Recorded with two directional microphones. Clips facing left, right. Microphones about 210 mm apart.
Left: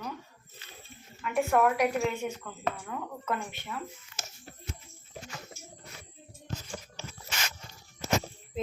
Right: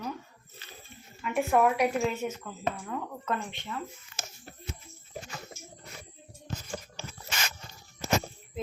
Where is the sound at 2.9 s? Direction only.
5° left (ahead or behind).